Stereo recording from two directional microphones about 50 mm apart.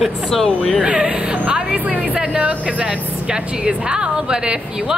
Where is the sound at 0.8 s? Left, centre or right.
Centre.